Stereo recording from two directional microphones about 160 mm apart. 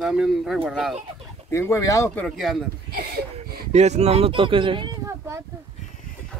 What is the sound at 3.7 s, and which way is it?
Speech, 45° right (ahead or behind).